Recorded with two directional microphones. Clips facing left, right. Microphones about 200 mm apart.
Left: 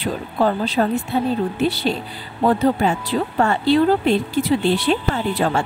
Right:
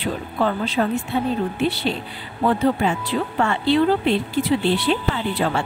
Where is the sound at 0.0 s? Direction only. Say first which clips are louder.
Left 2 dB; 40° left (ahead or behind).